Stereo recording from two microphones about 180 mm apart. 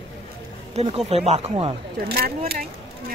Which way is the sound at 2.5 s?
50° right (ahead or behind).